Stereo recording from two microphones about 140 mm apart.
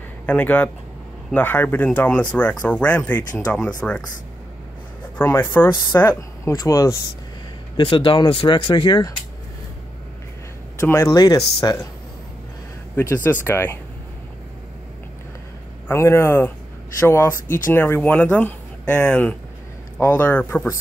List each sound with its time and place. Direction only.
0.3 s speech: 10° left (ahead or behind)
5.1 s speech: 15° left (ahead or behind)
7.7 s speech: 40° left (ahead or behind)
10.8 s speech: 15° left (ahead or behind)
12.9 s speech: 20° left (ahead or behind)
15.9 s speech: 20° left (ahead or behind)